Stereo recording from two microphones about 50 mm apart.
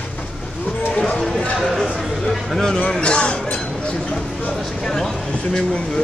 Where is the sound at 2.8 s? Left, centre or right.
Centre.